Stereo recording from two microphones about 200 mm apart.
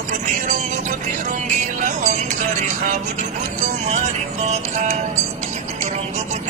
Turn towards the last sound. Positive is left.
turn(degrees=-35)  # may be behind; listen again after turning